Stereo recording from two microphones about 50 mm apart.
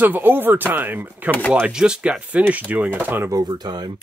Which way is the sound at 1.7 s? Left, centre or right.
Centre.